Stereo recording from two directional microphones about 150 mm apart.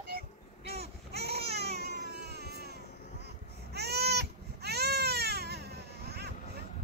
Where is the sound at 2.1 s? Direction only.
90° right.